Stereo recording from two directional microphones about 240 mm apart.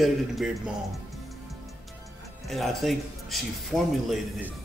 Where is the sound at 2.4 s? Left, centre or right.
Centre.